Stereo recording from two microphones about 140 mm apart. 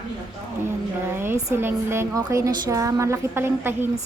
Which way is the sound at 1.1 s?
15° right (ahead or behind).